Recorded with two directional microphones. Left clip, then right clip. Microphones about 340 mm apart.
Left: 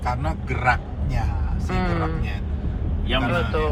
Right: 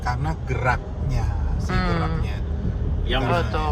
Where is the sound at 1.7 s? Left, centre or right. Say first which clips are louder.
Right 1 dB; centre.